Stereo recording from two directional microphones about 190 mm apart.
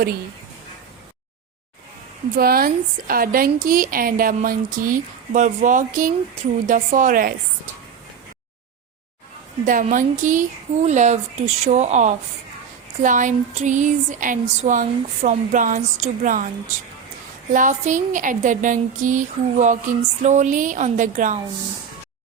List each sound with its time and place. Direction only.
2.3 s speech: 50° right (ahead or behind)
9.6 s speech: 45° right (ahead or behind)
17.5 s speech: 40° right (ahead or behind)